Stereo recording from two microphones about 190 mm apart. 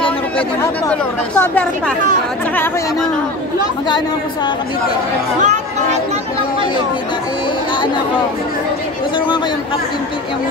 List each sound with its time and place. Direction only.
0.4 s speech: 10° left (ahead or behind)
5.4 s speech: 40° right (ahead or behind)